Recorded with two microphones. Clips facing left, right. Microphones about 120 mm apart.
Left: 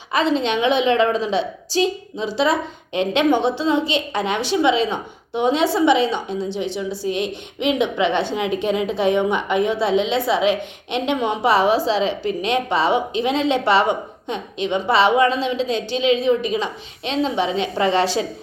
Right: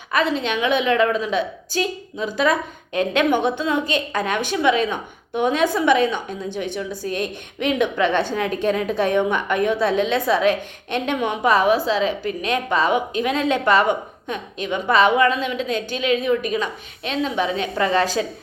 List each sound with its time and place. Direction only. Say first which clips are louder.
0.1 s a woman's voice: left 2 dB; 30° left (ahead or behind)